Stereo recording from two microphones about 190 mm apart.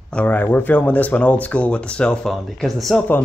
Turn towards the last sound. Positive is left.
turn(degrees=0)  # may be behind; listen again after turning